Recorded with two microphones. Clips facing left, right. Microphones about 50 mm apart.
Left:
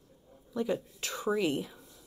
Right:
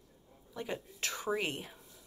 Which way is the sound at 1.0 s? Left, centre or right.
Right.